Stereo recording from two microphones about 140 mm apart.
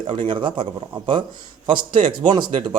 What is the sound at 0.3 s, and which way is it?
A man's voice, 40° right (ahead or behind).